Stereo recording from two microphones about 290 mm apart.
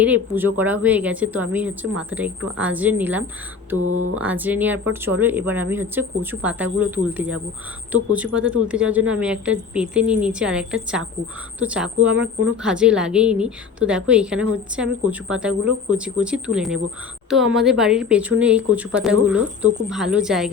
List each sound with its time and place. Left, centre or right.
0.0 s speech: centre
3.8 s speech: right
4.1 s speech: centre